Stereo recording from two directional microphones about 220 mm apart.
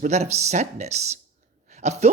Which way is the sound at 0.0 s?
30° right (ahead or behind).